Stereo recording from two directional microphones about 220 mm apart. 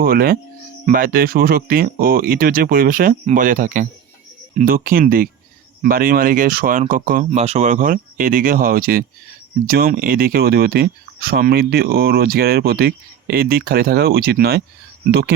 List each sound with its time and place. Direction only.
0.0 s speech: 40° right (ahead or behind)